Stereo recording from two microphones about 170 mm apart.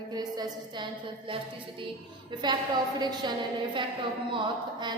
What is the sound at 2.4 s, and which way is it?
Speech, 25° right (ahead or behind).